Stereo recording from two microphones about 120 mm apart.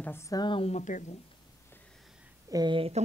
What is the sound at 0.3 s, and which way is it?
Speech, 35° left (ahead or behind).